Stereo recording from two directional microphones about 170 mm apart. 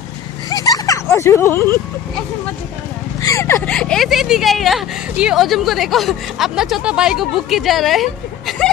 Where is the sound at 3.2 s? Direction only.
15° left (ahead or behind).